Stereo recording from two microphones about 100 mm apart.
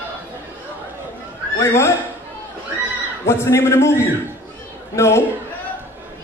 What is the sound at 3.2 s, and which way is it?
A man's voice, 25° left (ahead or behind).